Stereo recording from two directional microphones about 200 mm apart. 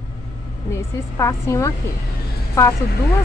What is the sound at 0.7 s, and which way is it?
A woman's voice, 15° left (ahead or behind).